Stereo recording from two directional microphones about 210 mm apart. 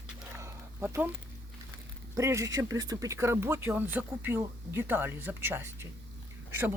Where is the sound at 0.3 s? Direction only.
15° right (ahead or behind).